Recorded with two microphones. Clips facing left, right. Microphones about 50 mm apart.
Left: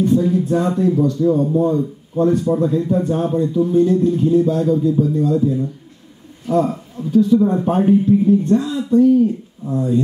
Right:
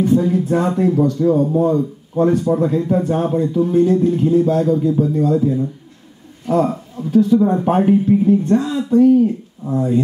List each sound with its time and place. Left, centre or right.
0.0 s speech: right
0.3 s a man's voice: right
4.6 s speech: right
5.0 s a man's voice: right
6.5 s speech: right